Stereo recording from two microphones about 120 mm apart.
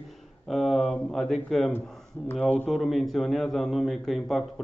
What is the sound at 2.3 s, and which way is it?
Speech, 15° left (ahead or behind).